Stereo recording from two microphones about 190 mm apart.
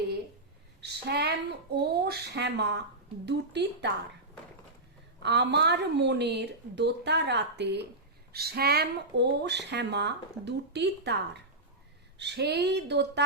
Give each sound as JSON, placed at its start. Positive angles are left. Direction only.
{"t": 0.8, "sound": "a woman's voice", "side_deg": -60}
{"t": 5.2, "sound": "speech", "side_deg": -60}